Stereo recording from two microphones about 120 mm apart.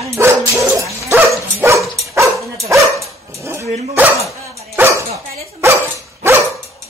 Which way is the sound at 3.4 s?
20° right (ahead or behind).